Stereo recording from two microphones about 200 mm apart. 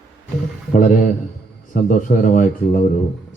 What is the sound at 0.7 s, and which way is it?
A man's voice, 40° left (ahead or behind).